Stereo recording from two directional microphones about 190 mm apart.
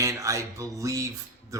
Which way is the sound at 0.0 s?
15° right (ahead or behind).